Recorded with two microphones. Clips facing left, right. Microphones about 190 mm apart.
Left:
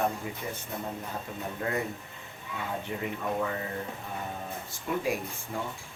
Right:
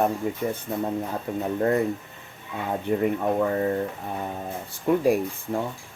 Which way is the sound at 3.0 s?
45° right (ahead or behind).